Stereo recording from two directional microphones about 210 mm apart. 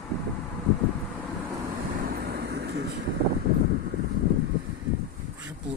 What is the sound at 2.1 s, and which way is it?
Vehicle, 45° right (ahead or behind).